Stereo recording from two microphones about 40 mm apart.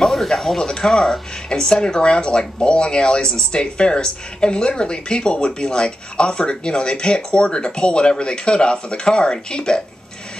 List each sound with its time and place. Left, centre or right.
0.0 s speech: centre